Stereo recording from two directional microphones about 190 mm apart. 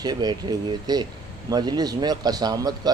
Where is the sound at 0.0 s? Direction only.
20° right (ahead or behind).